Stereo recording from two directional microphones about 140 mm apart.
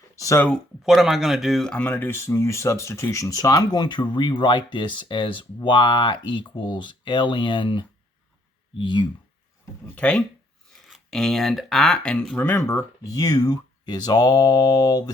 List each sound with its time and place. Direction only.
0.2 s speech: 20° left (ahead or behind)
0.9 s speech: 5° right (ahead or behind); by 9.0 s 35° left (ahead or behind)
9.9 s speech: 10° left (ahead or behind)
12.4 s speech: 15° left (ahead or behind)